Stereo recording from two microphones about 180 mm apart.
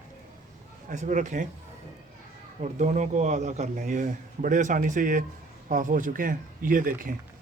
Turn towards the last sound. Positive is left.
turn(degrees=-50)  # may be behind; listen again after turning